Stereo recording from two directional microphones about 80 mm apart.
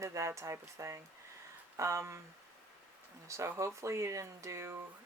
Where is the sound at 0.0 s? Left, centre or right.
Right.